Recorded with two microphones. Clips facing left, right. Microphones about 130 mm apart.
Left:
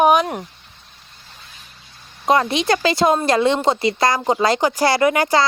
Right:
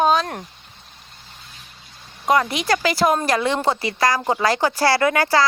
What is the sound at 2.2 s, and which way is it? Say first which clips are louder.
Speech: left 2 dB; 25° left (ahead or behind).